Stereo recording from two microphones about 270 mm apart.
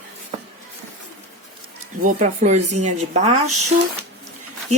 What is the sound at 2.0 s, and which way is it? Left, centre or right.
Speech, right.